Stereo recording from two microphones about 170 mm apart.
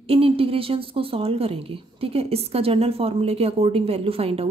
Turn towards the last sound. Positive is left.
turn(degrees=-35)  # may be behind; listen again after turning